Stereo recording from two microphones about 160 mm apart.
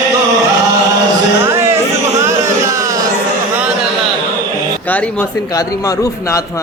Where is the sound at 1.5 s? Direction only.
15° right (ahead or behind).